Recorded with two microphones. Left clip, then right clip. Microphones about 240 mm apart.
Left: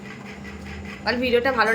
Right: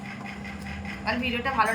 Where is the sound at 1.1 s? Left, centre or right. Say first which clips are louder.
Left 7 dB; centre.